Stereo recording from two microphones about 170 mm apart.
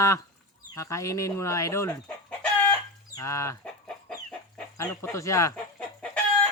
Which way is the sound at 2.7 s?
20° left (ahead or behind).